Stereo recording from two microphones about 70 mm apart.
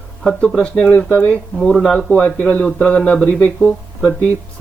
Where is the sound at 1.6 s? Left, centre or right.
Centre.